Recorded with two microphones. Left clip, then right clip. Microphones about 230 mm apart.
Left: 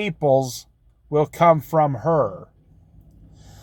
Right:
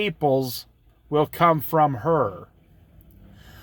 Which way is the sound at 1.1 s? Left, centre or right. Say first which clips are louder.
Left 3 dB; right.